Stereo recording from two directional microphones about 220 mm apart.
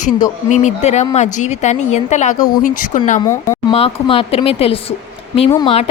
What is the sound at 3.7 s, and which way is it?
A woman's voice, 25° left (ahead or behind).